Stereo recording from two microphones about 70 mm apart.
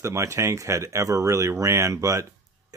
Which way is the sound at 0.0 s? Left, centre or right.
Right.